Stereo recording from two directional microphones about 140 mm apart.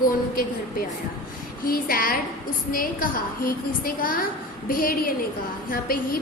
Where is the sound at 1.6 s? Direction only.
90° left.